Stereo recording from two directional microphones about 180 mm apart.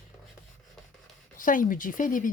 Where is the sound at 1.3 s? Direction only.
50° left (ahead or behind).